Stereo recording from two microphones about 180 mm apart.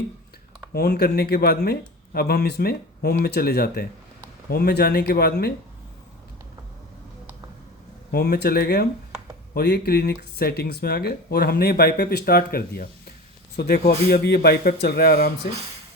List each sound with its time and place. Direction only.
0.7 s speech: 60° left (ahead or behind)
8.1 s speech: 65° left (ahead or behind)